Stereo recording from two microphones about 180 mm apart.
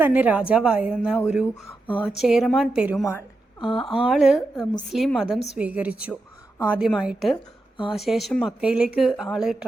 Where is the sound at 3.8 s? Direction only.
Centre (ahead or behind).